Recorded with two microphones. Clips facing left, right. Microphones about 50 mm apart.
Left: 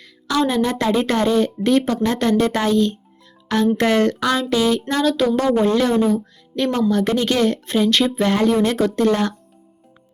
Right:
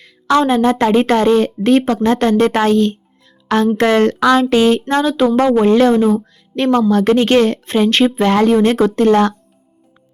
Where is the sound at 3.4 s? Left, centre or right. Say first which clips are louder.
Right 4 dB; right.